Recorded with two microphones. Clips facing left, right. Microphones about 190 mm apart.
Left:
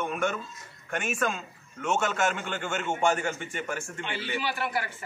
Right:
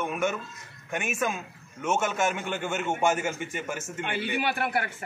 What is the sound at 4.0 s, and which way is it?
Speech, 55° right (ahead or behind).